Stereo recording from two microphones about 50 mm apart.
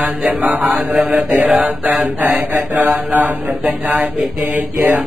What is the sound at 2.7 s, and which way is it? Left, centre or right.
Mantra, right.